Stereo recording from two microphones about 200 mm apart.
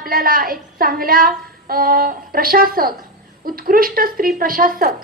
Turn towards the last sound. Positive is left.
turn(degrees=-45)  # may be behind; listen again after turning